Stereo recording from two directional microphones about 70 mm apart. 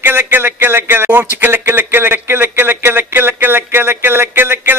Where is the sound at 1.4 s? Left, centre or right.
Right.